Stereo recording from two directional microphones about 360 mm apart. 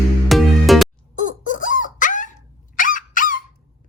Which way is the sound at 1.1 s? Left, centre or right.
Left.